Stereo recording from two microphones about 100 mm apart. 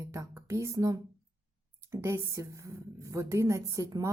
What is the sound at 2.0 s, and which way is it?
Speech, 30° right (ahead or behind).